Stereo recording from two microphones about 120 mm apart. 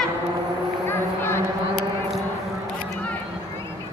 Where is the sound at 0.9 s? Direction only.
20° left (ahead or behind).